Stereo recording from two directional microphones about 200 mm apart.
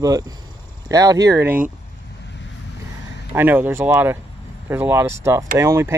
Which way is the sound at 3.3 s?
10° right (ahead or behind).